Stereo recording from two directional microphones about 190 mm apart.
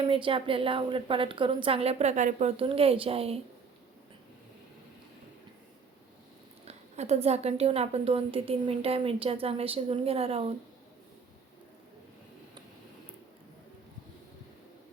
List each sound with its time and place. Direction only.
0.0 s a woman's voice: 25° right (ahead or behind)
6.7 s speech: 35° right (ahead or behind)